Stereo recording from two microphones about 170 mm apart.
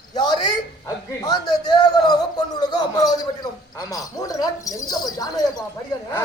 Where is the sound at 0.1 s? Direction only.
25° left (ahead or behind).